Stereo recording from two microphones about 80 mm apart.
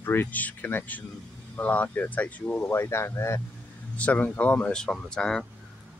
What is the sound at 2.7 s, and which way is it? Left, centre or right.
Speech, left.